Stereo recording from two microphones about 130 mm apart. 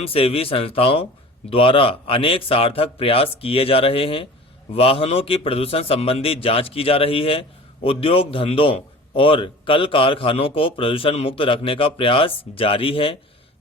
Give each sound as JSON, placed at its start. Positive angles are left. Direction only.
{"t": 0.0, "sound": "a man's voice", "side_deg": 45}